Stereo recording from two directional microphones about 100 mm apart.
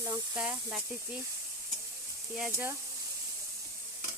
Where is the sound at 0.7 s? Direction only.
5° right (ahead or behind).